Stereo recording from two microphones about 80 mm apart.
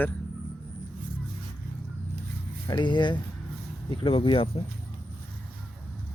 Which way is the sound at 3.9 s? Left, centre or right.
Left.